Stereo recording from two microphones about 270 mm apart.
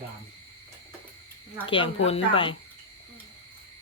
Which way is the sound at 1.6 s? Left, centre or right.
Centre.